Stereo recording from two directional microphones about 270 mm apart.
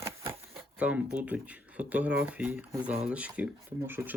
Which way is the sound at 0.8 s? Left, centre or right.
Centre.